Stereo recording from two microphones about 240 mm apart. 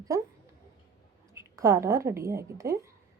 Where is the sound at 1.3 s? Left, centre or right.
Centre.